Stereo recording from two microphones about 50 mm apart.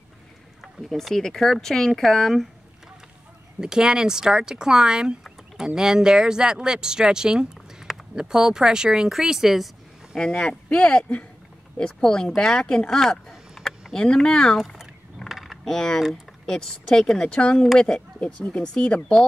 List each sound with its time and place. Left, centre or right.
0.8 s speech: centre
3.6 s a woman's voice: centre
10.1 s speech: centre
14.8 s mechanisms: centre
15.6 s speech: centre